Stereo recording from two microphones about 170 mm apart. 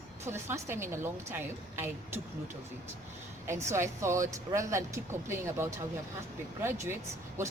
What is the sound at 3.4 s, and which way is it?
Speech, 15° right (ahead or behind).